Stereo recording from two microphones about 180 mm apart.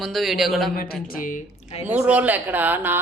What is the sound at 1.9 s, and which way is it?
Speech, 5° right (ahead or behind).